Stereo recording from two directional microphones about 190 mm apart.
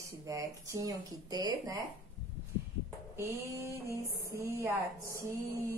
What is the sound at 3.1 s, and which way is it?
Speech, 15° right (ahead or behind).